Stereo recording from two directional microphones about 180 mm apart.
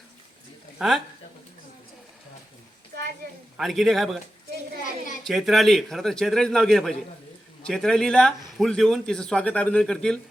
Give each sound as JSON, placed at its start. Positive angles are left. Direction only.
{"t": 0.8, "sound": "a man's voice", "side_deg": 0}
{"t": 3.6, "sound": "a man's voice", "side_deg": 0}
{"t": 5.2, "sound": "a man's voice", "side_deg": 0}